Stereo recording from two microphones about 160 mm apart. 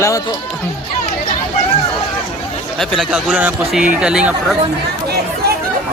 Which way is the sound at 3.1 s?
10° right (ahead or behind).